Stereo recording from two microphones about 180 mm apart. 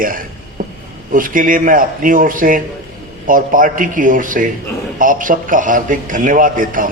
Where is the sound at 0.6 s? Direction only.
50° right (ahead or behind).